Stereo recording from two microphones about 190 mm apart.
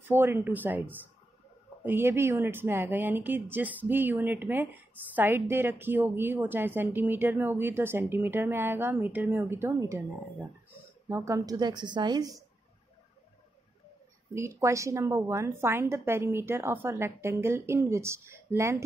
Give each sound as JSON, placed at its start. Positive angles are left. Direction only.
{"t": 0.0, "sound": "a woman's voice", "side_deg": -10}
{"t": 11.1, "sound": "a woman's voice", "side_deg": -15}
{"t": 14.3, "sound": "a woman's voice", "side_deg": -15}